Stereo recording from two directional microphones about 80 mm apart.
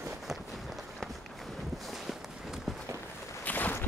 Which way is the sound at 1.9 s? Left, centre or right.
Centre.